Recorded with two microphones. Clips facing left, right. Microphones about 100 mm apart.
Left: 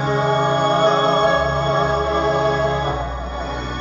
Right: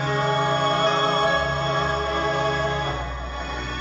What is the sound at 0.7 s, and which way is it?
Music, 25° left (ahead or behind).